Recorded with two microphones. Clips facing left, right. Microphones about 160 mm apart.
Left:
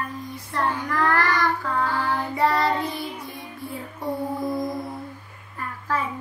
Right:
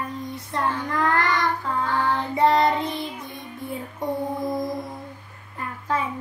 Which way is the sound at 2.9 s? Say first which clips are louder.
Right 1 dB; 20° right (ahead or behind).